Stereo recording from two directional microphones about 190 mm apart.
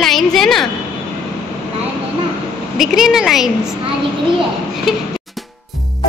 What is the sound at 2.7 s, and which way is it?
Speech, centre (ahead or behind).